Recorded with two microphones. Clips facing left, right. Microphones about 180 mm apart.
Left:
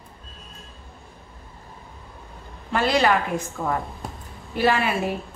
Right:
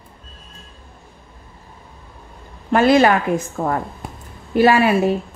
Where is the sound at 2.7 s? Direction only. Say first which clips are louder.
Right 7 dB; 50° right (ahead or behind).